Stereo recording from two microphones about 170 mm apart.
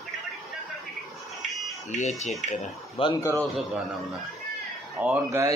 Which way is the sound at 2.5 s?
30° left (ahead or behind).